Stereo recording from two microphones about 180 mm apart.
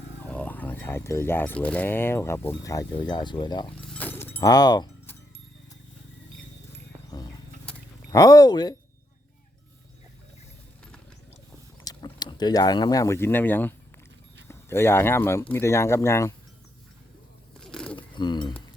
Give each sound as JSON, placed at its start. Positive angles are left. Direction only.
{"t": 0.3, "sound": "speech", "side_deg": 10}
{"t": 3.9, "sound": "dog", "side_deg": 10}
{"t": 4.4, "sound": "speech", "side_deg": 20}
{"t": 7.1, "sound": "wild animals", "side_deg": 20}
{"t": 8.1, "sound": "speech", "side_deg": 20}
{"t": 11.9, "sound": "speech", "side_deg": 25}
{"t": 17.6, "sound": "pigeon", "side_deg": 5}
{"t": 17.9, "sound": "bird", "side_deg": 25}